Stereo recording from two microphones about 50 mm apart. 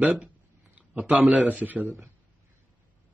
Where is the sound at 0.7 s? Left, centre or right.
Right.